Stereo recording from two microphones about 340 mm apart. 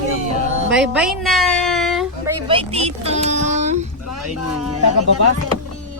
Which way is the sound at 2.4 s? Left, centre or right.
Centre.